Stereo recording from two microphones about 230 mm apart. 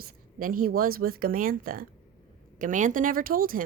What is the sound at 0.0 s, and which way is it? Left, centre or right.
Speech, right.